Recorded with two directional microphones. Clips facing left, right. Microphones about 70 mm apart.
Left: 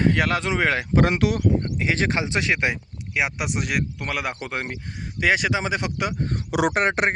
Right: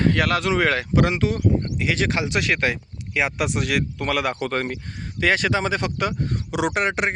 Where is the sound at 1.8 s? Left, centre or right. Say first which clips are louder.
Right 1 dB; left.